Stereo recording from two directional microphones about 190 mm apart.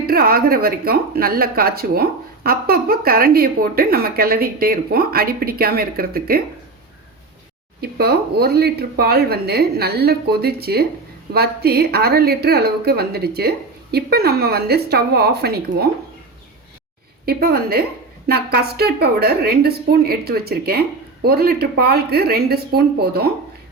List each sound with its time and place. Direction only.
0.1 s a woman's voice: 50° right (ahead or behind)
7.8 s a woman's voice: 55° right (ahead or behind)
17.2 s a woman's voice: 55° right (ahead or behind)